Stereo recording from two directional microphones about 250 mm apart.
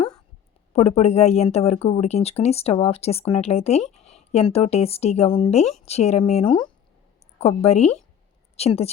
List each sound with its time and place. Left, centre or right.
0.7 s speech: left